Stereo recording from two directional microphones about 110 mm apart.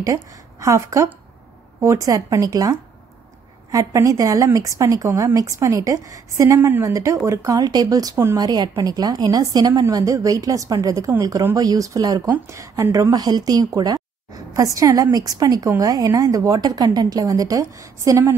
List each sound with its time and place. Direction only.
0.0 s a woman's voice: 30° right (ahead or behind)